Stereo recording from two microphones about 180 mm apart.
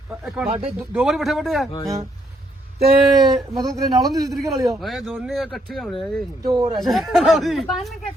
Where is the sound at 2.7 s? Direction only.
60° right (ahead or behind).